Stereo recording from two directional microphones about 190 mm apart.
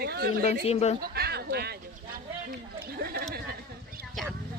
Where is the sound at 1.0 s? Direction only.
55° right (ahead or behind).